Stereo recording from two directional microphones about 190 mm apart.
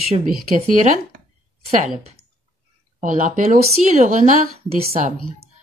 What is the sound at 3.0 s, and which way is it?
Speech, 45° right (ahead or behind).